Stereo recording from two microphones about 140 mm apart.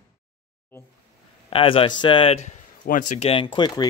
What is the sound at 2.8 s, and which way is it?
Speech, 75° left (ahead or behind).